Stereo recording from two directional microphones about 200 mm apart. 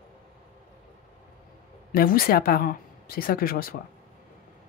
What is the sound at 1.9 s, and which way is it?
Speech, 45° left (ahead or behind).